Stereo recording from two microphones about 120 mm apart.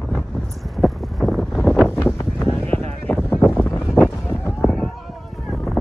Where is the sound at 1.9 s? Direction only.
20° left (ahead or behind).